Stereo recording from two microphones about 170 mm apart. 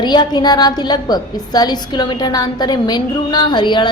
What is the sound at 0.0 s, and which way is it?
A woman's voice, 25° left (ahead or behind).